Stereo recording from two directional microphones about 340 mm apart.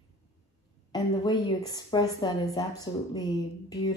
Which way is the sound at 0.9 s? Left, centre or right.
Centre.